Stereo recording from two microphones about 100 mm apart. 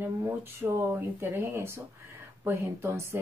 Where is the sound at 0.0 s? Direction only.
25° right (ahead or behind).